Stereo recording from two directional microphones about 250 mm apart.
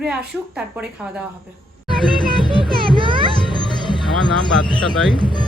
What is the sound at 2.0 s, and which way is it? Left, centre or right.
Music, centre.